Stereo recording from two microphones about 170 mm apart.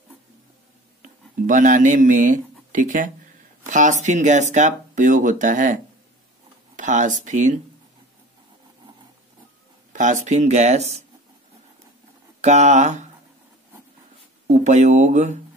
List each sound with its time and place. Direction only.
1.0 s speech: 50° right (ahead or behind)
6.8 s speech: 45° right (ahead or behind)
9.9 s speech: 45° right (ahead or behind)
12.4 s speech: 40° right (ahead or behind)
14.5 s speech: 45° right (ahead or behind)